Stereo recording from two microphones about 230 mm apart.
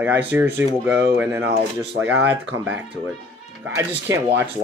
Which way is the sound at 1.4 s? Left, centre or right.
Right.